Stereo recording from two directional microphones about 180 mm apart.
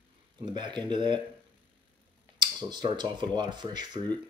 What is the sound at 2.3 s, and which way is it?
Speech, 25° right (ahead or behind).